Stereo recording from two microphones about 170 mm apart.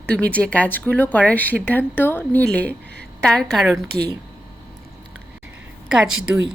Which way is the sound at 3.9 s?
70° right (ahead or behind).